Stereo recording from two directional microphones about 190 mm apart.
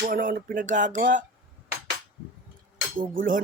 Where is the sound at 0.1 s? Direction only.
45° right (ahead or behind).